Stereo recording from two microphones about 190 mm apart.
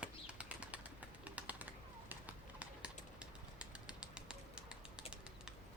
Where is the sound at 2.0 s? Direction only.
10° right (ahead or behind).